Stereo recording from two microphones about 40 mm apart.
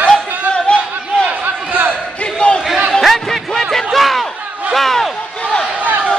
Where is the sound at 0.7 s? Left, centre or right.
Left.